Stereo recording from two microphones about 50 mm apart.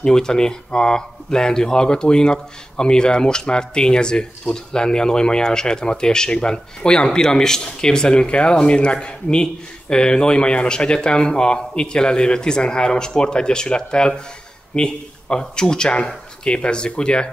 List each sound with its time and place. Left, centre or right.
0.0 s speech: centre